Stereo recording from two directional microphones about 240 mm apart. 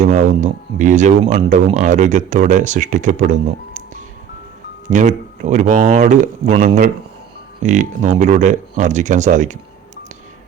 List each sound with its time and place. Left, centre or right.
0.0 s speech: right
4.9 s speech: right